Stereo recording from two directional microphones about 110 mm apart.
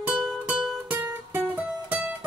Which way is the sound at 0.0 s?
5° right (ahead or behind).